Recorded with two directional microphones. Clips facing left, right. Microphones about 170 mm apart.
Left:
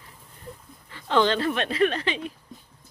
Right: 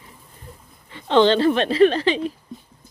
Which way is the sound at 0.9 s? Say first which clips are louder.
Right 6 dB; 25° right (ahead or behind).